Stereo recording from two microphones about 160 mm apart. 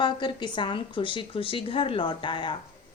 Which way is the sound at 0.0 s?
30° left (ahead or behind).